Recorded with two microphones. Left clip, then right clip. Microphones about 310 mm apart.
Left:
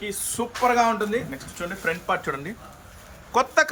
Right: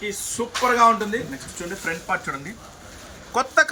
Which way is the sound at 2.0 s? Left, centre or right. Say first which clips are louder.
Even; centre.